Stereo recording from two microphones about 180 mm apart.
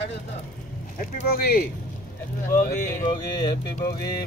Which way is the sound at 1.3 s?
55° left (ahead or behind).